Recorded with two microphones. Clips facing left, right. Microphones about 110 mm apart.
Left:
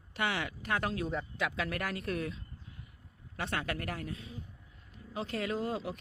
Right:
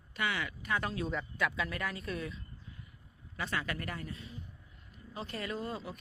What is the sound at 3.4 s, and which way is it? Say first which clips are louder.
Speech: left 1 dB; 60° left (ahead or behind).